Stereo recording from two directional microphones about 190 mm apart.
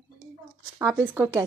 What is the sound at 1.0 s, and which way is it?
Speech, 10° right (ahead or behind).